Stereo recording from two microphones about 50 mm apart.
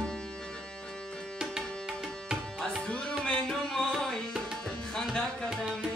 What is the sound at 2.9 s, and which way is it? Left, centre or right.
Tabla, centre.